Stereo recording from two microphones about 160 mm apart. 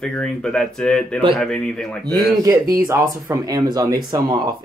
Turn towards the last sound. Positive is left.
turn(degrees=-25)  # may be behind; listen again after turning